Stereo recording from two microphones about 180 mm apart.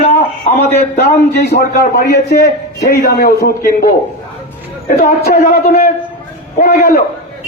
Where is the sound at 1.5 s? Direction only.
65° left (ahead or behind).